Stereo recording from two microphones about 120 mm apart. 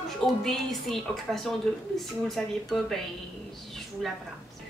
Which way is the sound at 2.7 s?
Centre (ahead or behind).